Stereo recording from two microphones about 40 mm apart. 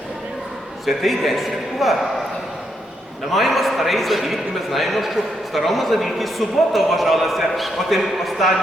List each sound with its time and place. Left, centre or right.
0.9 s a man's voice: centre
3.3 s a man's voice: centre